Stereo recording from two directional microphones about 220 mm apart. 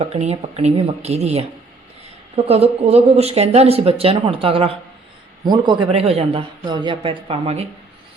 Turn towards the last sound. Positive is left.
turn(degrees=-30)  # may be behind; listen again after turning